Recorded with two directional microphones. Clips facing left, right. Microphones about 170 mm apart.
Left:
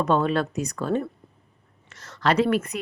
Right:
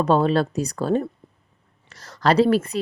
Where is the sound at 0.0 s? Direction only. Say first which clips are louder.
Right 3 dB; 35° right (ahead or behind).